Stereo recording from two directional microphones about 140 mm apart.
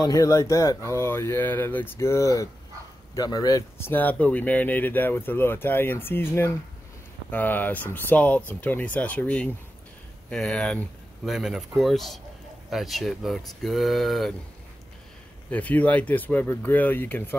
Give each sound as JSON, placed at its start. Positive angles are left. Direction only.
{"t": 0.0, "sound": "speech", "side_deg": 25}
{"t": 3.9, "sound": "speech", "side_deg": 10}
{"t": 15.5, "sound": "speech", "side_deg": 10}